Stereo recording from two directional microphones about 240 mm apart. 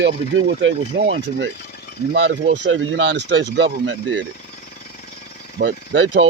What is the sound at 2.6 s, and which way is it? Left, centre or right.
Speech, right.